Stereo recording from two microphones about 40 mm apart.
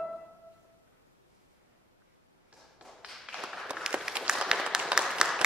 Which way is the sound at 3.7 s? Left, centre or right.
Right.